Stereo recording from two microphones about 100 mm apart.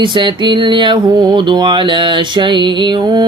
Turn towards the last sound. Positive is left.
turn(degrees=-45)  # may be behind; listen again after turning